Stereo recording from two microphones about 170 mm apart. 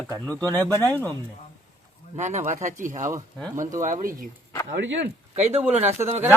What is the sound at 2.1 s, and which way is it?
Speech, 45° right (ahead or behind).